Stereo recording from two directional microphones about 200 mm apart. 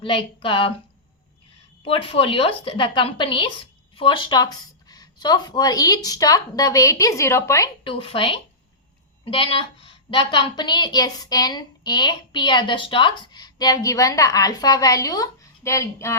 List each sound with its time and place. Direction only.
0.0 s a woman's voice: 25° left (ahead or behind)
1.8 s a woman's voice: 25° left (ahead or behind)
7.9 s a woman's voice: 25° left (ahead or behind)